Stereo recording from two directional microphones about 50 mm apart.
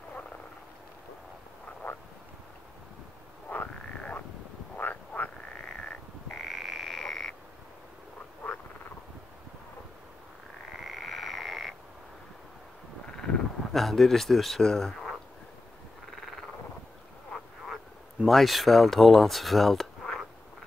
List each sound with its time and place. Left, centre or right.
1.8 s frog: left
3.4 s frog: left
4.7 s frog: left
5.6 s frog: centre
6.3 s frog: centre
10.8 s frog: centre
13.2 s speech: centre
16.2 s frog: centre
18.3 s speech: centre